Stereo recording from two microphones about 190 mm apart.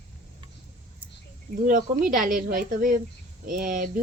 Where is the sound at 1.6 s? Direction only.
45° right (ahead or behind).